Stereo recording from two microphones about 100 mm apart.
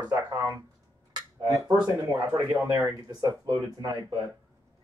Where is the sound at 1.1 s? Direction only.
40° right (ahead or behind).